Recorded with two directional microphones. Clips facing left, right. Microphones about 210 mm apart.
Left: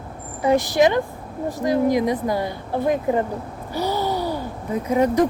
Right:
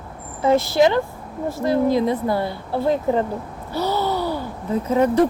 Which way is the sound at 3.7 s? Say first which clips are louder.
Right 1 dB; 15° left (ahead or behind).